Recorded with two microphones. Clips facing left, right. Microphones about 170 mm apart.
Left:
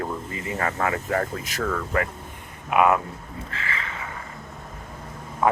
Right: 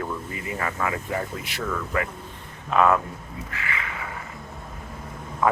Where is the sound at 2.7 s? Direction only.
15° left (ahead or behind).